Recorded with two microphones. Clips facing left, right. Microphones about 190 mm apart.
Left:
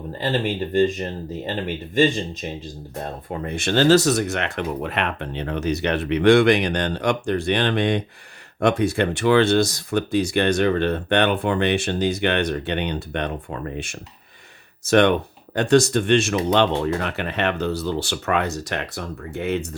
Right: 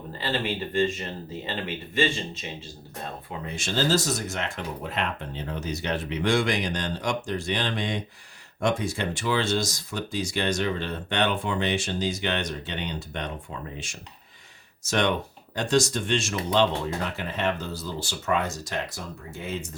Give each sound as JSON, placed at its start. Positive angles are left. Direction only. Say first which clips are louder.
{"t": 0.2, "sound": "speech", "louder": "left 5 dB", "side_deg": 40}
{"t": 3.2, "sound": "speech", "louder": "left 9 dB", "side_deg": 55}